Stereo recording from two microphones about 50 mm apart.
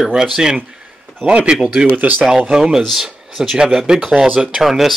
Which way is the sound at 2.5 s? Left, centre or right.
Centre.